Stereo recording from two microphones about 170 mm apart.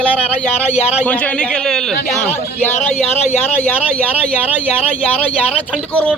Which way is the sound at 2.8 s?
45° left (ahead or behind).